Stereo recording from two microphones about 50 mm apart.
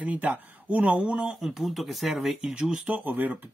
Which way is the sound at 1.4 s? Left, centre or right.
Centre.